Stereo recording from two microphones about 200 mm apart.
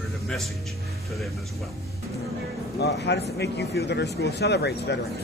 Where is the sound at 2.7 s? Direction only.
60° left (ahead or behind).